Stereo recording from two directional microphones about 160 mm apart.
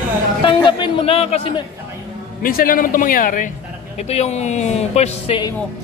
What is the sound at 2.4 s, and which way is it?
A man's voice, 60° left (ahead or behind).